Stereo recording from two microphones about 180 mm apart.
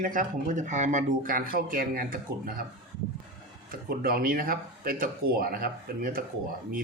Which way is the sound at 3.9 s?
55° right (ahead or behind).